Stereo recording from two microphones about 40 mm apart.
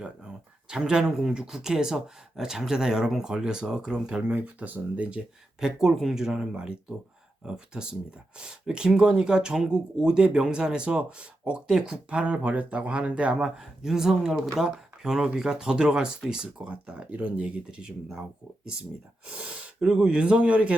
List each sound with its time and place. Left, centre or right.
0.0 s speech: right
4.4 s speech: right
5.5 s speech: centre; by 13.3 s right
13.3 s speech: centre
19.3 s speech: right
19.8 s speech: right